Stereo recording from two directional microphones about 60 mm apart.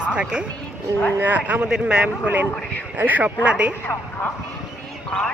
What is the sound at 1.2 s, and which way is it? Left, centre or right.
A man's voice, right.